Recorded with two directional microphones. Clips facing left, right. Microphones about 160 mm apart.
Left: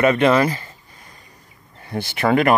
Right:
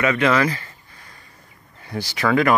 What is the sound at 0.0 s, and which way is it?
Speech, 25° left (ahead or behind).